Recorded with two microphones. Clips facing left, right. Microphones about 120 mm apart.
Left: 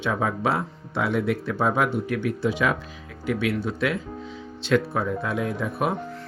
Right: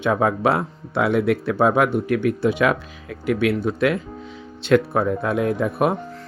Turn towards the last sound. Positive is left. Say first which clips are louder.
# right 6 dB
turn(degrees=-55)  # may be behind; listen again after turning